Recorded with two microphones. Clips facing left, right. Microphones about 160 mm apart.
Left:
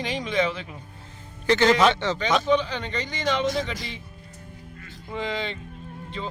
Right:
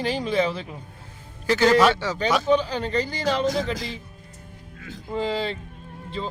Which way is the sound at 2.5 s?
40° right (ahead or behind).